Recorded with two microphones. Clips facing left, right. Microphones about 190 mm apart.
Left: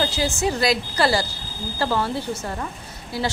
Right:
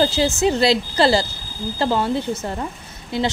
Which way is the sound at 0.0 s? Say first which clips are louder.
Right 5 dB; 25° right (ahead or behind).